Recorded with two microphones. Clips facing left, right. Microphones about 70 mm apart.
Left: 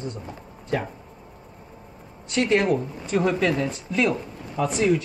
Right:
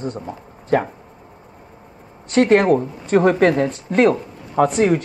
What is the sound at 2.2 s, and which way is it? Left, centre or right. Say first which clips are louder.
Speech: right 7 dB; right.